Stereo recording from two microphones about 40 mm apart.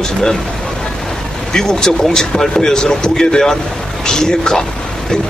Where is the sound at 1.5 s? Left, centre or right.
Centre.